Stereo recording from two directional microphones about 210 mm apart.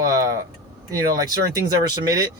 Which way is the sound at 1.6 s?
20° right (ahead or behind).